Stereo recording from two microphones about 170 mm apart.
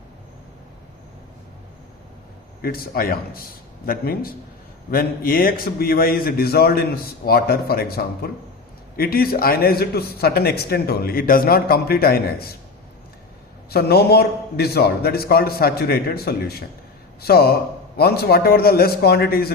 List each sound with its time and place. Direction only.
2.6 s a man's voice: 60° left (ahead or behind)
13.7 s a man's voice: 70° left (ahead or behind)